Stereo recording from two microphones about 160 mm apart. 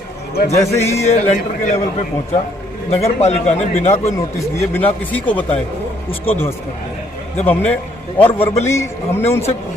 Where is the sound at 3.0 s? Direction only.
45° left (ahead or behind).